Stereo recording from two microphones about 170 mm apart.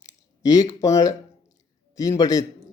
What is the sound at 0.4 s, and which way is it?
A man's voice, 20° left (ahead or behind).